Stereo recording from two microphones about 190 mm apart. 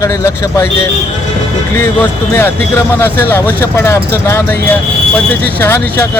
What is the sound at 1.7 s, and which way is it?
Speech, 15° left (ahead or behind).